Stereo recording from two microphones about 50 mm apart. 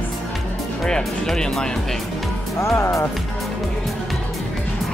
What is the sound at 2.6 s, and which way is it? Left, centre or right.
Speech, left.